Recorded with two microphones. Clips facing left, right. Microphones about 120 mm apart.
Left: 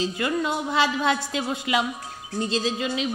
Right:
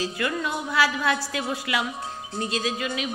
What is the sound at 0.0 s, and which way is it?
Speech, 25° left (ahead or behind).